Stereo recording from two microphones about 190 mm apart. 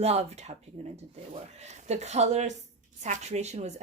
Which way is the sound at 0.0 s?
35° right (ahead or behind).